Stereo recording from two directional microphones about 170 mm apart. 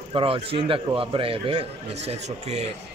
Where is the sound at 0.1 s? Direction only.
30° right (ahead or behind).